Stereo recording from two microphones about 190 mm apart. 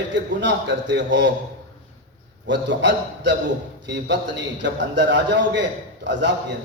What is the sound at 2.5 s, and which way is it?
A man's voice, 70° right (ahead or behind).